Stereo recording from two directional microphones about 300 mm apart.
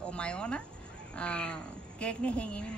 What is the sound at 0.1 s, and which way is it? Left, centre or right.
A woman's voice, centre.